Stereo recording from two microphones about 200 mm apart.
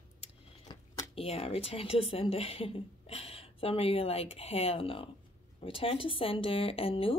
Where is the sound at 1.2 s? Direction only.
30° left (ahead or behind).